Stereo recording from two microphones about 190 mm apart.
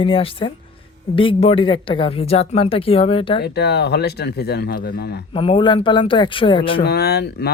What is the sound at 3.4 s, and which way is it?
Speech, 60° left (ahead or behind).